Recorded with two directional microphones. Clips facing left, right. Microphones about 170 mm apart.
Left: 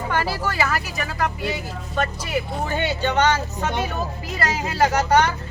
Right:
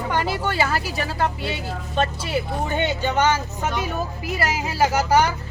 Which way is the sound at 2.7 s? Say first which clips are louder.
Left 1 dB; 15° right (ahead or behind).